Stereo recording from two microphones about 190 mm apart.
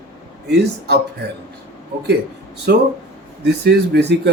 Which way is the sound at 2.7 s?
55° right (ahead or behind).